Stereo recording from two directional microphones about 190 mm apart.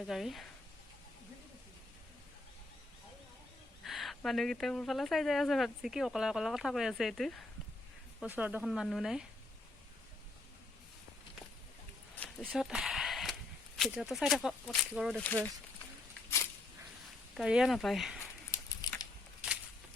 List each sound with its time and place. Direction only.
0.1 s speech: centre (ahead or behind)
3.8 s speech: centre (ahead or behind)
12.1 s a sound: 5° left (ahead or behind)
13.7 s speech: centre (ahead or behind)
17.3 s speech: 5° right (ahead or behind)
18.8 s a sound: 20° left (ahead or behind)